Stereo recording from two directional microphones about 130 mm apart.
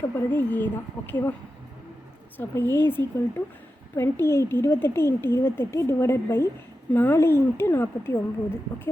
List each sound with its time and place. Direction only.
0.2 s speech: 15° left (ahead or behind)
2.4 s speech: 15° left (ahead or behind)